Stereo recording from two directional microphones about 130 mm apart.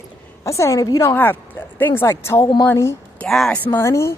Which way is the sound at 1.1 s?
15° left (ahead or behind).